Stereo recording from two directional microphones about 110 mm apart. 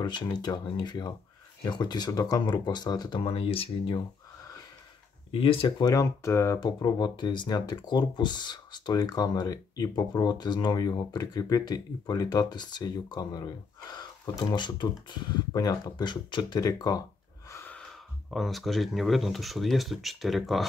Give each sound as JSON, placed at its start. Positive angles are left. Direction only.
{"t": 0.0, "sound": "speech", "side_deg": 40}
{"t": 3.2, "sound": "speech", "side_deg": 60}
{"t": 5.3, "sound": "speech", "side_deg": 55}
{"t": 5.8, "sound": "speech", "side_deg": 30}
{"t": 17.6, "sound": "speech", "side_deg": 5}